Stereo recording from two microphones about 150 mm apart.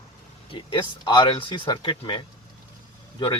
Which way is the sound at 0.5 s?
35° left (ahead or behind).